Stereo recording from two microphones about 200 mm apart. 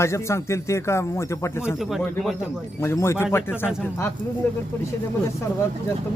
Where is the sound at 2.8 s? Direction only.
15° left (ahead or behind).